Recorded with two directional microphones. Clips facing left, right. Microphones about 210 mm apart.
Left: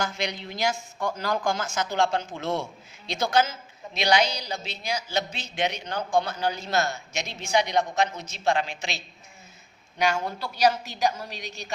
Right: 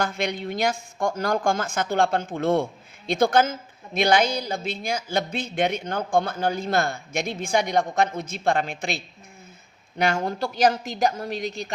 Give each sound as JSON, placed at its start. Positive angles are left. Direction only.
{"t": 0.0, "sound": "a woman's voice", "side_deg": -55}